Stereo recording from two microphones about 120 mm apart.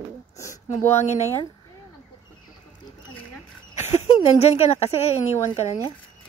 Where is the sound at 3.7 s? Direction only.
65° left (ahead or behind).